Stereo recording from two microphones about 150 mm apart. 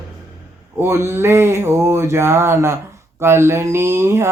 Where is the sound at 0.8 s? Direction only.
15° right (ahead or behind).